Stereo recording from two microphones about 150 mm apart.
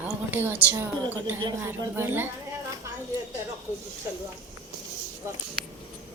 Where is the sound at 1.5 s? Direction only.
20° right (ahead or behind).